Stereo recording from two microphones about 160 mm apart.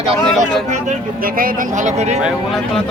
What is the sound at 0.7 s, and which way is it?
Speech, 55° right (ahead or behind).